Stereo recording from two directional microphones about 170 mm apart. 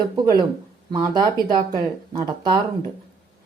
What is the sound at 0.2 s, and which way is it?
Speech, 25° right (ahead or behind).